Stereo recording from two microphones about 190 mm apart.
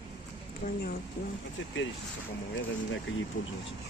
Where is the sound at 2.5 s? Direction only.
75° left (ahead or behind).